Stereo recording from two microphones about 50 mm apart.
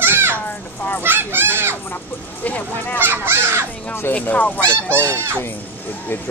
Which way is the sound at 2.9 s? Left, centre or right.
Right.